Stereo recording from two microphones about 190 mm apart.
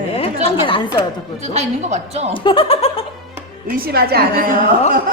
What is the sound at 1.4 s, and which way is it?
Speech, 35° right (ahead or behind).